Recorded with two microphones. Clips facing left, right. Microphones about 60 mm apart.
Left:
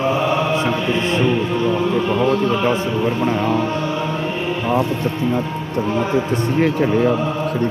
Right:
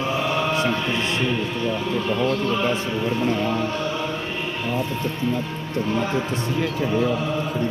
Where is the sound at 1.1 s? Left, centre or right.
Left.